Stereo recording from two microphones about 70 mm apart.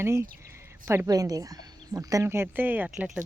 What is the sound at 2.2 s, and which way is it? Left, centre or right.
Speech, right.